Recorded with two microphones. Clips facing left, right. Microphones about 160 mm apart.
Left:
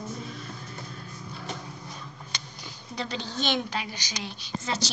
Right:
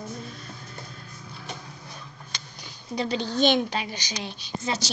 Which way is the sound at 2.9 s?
15° right (ahead or behind).